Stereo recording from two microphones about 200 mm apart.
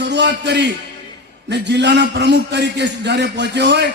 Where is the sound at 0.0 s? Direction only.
60° right (ahead or behind).